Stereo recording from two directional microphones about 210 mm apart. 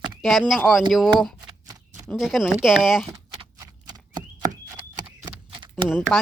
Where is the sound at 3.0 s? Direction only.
20° right (ahead or behind).